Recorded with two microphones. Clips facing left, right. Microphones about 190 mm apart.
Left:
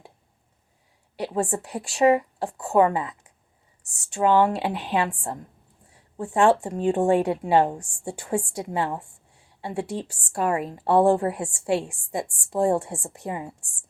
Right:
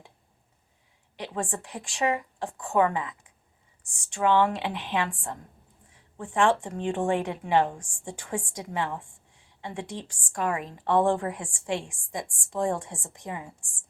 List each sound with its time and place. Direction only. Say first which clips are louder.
1.1 s speech: left 7 dB; 35° left (ahead or behind)